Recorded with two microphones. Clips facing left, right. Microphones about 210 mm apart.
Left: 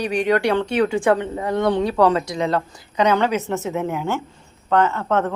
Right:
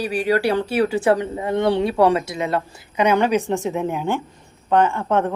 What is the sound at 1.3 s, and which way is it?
A woman's voice, 25° right (ahead or behind).